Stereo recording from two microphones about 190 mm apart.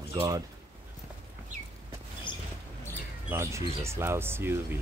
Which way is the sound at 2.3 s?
25° left (ahead or behind).